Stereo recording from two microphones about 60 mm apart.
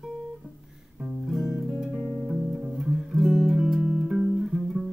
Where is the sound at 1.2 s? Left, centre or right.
Centre.